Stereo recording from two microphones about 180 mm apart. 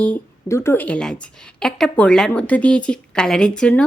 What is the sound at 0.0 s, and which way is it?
A woman's voice, 10° left (ahead or behind).